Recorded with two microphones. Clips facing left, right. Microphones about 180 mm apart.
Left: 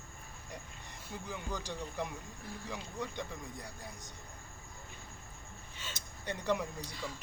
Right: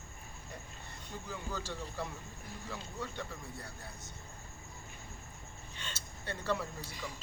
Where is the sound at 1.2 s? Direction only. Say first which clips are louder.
Even; 15° left (ahead or behind).